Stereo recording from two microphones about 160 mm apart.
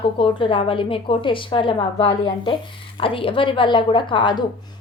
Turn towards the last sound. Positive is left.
turn(degrees=30)  # may be behind; listen again after turning